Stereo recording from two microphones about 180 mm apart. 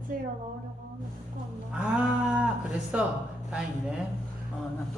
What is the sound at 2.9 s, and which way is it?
Speech, 5° right (ahead or behind).